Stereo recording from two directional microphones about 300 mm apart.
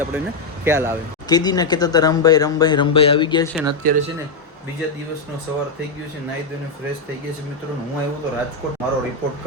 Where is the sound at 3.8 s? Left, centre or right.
Right.